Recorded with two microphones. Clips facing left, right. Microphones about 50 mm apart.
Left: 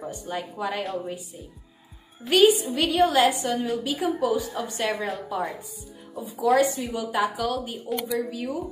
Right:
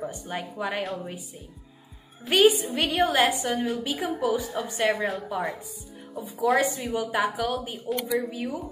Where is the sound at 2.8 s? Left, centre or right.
Right.